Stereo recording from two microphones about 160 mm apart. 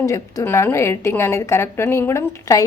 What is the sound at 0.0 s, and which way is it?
A woman's voice, 20° left (ahead or behind).